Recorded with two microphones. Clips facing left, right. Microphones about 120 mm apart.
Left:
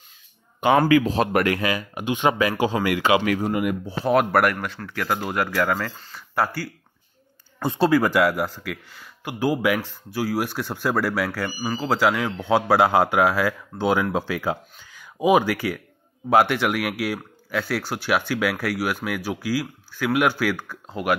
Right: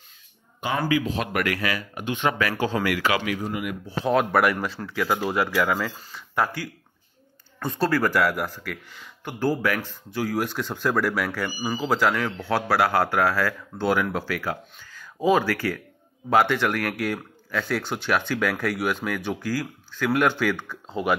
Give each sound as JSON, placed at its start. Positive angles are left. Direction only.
{"t": 0.6, "sound": "speech", "side_deg": 60}
{"t": 1.0, "sound": "speech", "side_deg": 35}
{"t": 3.4, "sound": "speech", "side_deg": 50}
{"t": 4.0, "sound": "speech", "side_deg": 5}
{"t": 6.1, "sound": "speech", "side_deg": 5}
{"t": 7.6, "sound": "speech", "side_deg": 30}
{"t": 7.9, "sound": "speech", "side_deg": 15}
{"t": 12.0, "sound": "speech", "side_deg": 10}